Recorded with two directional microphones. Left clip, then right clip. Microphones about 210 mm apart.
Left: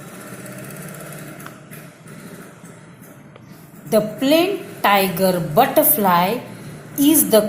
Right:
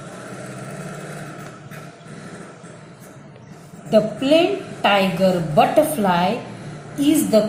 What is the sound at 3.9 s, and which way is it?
A woman's voice, 45° left (ahead or behind).